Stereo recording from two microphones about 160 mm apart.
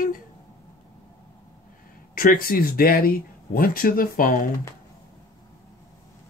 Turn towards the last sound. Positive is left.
turn(degrees=60)  # may be behind; listen again after turning